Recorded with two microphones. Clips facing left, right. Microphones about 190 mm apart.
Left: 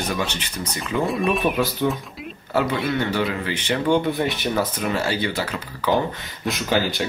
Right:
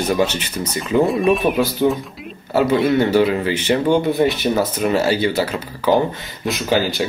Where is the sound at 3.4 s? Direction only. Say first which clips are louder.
Right 7 dB; 10° right (ahead or behind).